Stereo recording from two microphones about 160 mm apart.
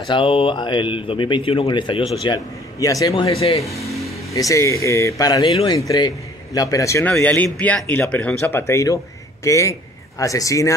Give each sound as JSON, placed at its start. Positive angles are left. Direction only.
{"t": 0.1, "sound": "speech", "side_deg": 35}
{"t": 3.3, "sound": "speech", "side_deg": 40}
{"t": 4.3, "sound": "speech", "side_deg": 20}
{"t": 5.5, "sound": "a man's voice", "side_deg": 35}